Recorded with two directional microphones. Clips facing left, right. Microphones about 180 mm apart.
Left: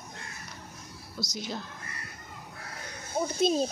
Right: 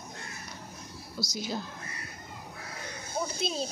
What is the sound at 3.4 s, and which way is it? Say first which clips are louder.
Speech: left 11 dB; 45° left (ahead or behind).